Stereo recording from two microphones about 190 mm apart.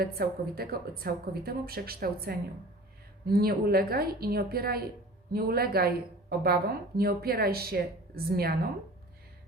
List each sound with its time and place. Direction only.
0.0 s a woman's voice: 55° right (ahead or behind)